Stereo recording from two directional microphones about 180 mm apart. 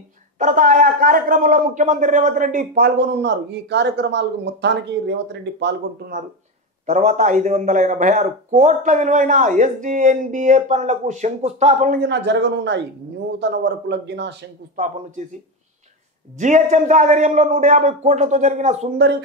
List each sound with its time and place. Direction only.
0.4 s speech: 45° right (ahead or behind)
3.0 s a man's voice: 75° right (ahead or behind)
6.9 s speech: 40° right (ahead or behind)
12.0 s a man's voice: 75° right (ahead or behind)
14.8 s speech: 45° right (ahead or behind)
16.3 s a man's voice: 45° right (ahead or behind)